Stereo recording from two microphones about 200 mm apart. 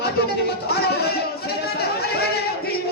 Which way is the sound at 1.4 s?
50° left (ahead or behind).